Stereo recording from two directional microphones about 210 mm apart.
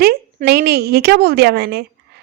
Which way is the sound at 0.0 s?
45° right (ahead or behind).